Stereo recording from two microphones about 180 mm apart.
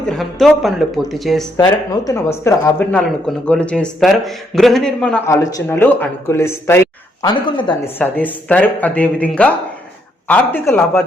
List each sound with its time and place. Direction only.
0.1 s speech: centre (ahead or behind)
1.5 s speech: 20° left (ahead or behind)
7.9 s speech: 10° left (ahead or behind)